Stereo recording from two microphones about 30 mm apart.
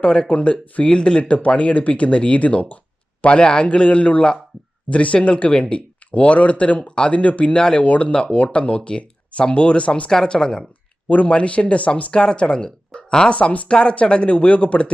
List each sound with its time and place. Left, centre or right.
0.0 s a man's voice: left
3.2 s a man's voice: left
6.1 s speech: left
7.5 s a man's voice: left
7.8 s speech: left
8.1 s a man's voice: left
10.2 s speech: left
11.3 s speech: left
12.1 s speech: left
13.3 s speech: left
13.7 s speech: left